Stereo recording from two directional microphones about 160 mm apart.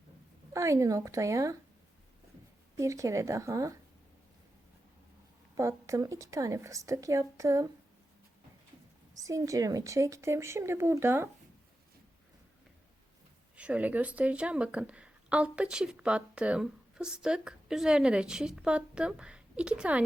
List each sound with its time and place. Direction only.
0.5 s a woman's voice: 20° right (ahead or behind)
2.7 s a woman's voice: 20° right (ahead or behind)
5.5 s a woman's voice: 20° right (ahead or behind)
9.1 s speech: 20° right (ahead or behind)
13.6 s speech: 10° right (ahead or behind)